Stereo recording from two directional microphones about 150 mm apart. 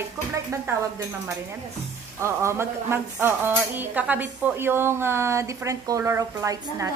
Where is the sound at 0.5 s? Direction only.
20° right (ahead or behind).